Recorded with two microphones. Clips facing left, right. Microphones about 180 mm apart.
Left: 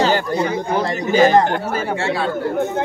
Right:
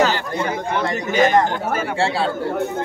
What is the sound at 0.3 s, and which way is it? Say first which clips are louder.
Chatter: left 3 dB; 35° left (ahead or behind).